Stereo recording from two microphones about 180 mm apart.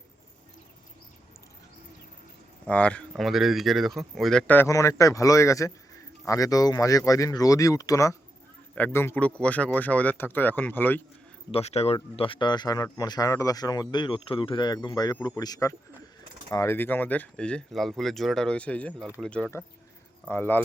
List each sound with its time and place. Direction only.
2.6 s speech: 5° left (ahead or behind)
11.5 s speech: 35° left (ahead or behind); by 20.7 s 10° left (ahead or behind)